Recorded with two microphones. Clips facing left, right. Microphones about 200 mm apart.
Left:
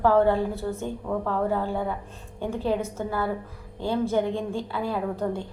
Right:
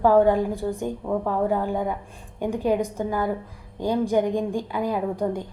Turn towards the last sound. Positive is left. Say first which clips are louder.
# right 2 dB
turn(degrees=-15)  # may be behind; listen again after turning